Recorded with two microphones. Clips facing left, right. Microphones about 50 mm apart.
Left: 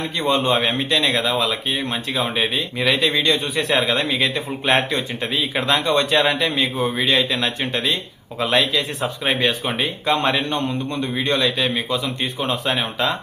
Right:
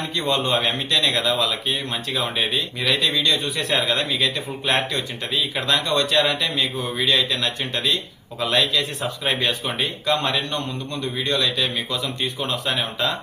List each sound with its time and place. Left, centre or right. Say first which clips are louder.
0.2 s a man's voice: left 3 dB; centre
3.2 s a man's voice: left 3 dB; left